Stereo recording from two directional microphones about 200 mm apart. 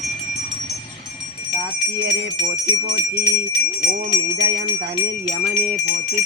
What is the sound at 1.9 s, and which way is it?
Bell, 60° right (ahead or behind).